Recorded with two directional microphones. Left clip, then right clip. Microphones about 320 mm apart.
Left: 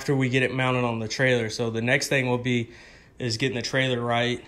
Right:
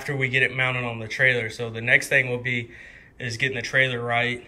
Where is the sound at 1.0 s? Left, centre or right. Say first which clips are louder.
Right 6 dB; left.